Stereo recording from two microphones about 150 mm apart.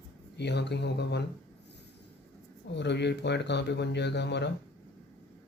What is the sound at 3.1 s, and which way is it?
Speech, 90° left.